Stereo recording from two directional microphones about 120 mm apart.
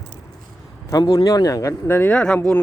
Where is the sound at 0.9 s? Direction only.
30° left (ahead or behind).